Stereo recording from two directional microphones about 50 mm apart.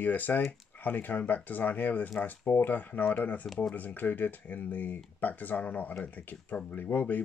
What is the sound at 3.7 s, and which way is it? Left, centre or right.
Speech, left.